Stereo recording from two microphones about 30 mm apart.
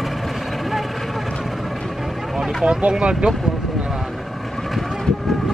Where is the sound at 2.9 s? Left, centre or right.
Right.